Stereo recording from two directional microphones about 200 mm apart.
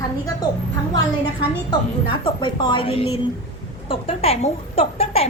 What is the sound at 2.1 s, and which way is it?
A woman's voice, 25° left (ahead or behind).